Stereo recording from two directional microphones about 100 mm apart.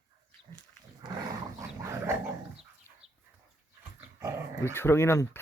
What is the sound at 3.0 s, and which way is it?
Chicken, 90° right.